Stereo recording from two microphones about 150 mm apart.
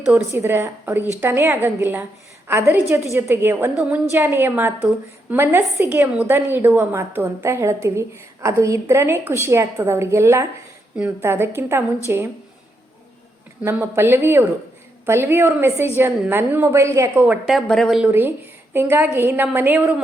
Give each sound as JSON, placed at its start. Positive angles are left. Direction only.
{"t": 0.1, "sound": "a woman's voice", "side_deg": -15}
{"t": 13.6, "sound": "a woman's voice", "side_deg": -15}
{"t": 17.2, "sound": "speech", "side_deg": -5}
{"t": 18.0, "sound": "a woman's voice", "side_deg": -15}